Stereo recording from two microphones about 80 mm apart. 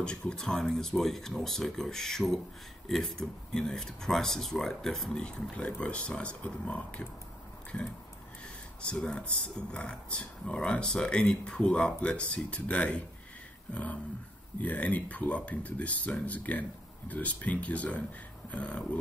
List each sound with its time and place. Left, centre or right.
0.0 s speech: centre
8.8 s speech: centre
14.6 s speech: centre